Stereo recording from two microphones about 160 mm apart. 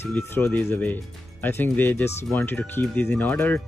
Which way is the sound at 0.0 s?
15° left (ahead or behind).